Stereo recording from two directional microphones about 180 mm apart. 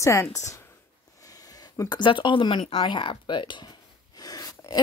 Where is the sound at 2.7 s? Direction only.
25° left (ahead or behind).